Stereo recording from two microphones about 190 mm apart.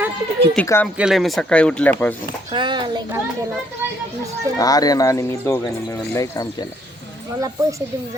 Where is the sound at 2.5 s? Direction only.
25° right (ahead or behind).